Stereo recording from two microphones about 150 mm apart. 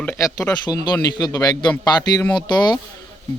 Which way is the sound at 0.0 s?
15° left (ahead or behind).